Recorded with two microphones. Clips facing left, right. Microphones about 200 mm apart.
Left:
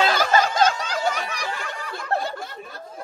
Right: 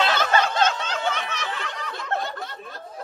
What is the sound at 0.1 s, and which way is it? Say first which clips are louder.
Snicker: left 2 dB; 10° left (ahead or behind).